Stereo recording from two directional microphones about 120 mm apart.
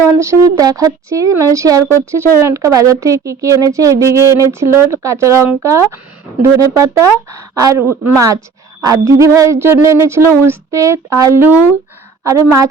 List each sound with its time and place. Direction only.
0.2 s speech: 25° right (ahead or behind)